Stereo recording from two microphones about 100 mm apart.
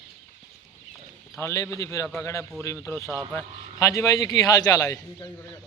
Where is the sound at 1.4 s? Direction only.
25° left (ahead or behind).